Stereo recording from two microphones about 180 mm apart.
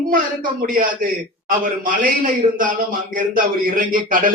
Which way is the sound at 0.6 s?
50° right (ahead or behind).